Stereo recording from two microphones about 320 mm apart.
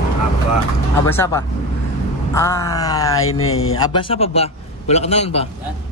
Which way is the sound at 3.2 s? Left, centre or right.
Left.